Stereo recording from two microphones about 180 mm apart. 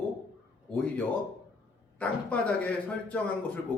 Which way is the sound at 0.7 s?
5° left (ahead or behind).